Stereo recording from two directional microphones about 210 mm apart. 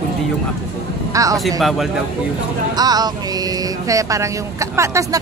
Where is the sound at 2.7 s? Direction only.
20° right (ahead or behind).